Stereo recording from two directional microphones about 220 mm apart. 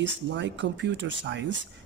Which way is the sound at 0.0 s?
55° right (ahead or behind).